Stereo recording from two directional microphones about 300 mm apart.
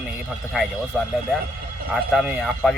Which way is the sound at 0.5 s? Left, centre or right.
Centre.